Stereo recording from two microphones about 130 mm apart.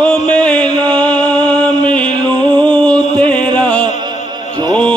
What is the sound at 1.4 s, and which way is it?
Music, 10° left (ahead or behind).